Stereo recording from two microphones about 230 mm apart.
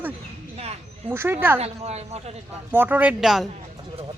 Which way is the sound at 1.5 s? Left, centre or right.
Right.